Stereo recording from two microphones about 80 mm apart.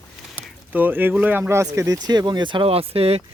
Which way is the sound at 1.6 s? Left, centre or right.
Right.